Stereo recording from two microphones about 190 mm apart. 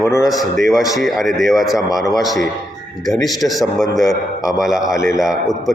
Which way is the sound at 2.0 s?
20° left (ahead or behind).